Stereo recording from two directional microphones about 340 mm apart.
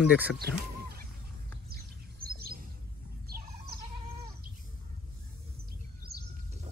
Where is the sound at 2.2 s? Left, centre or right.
Right.